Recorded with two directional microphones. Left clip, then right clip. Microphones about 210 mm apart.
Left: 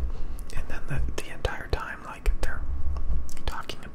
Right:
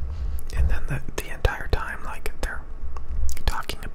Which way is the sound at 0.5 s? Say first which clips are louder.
Right 4 dB; 10° right (ahead or behind).